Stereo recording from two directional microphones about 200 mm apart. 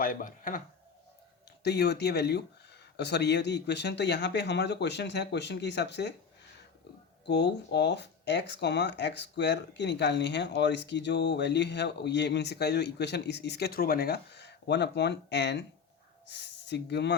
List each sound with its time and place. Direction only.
0.0 s speech: 45° left (ahead or behind)
1.6 s speech: 55° left (ahead or behind)
7.3 s speech: 55° left (ahead or behind)